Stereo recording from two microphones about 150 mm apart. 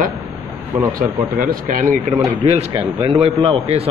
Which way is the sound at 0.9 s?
70° right (ahead or behind).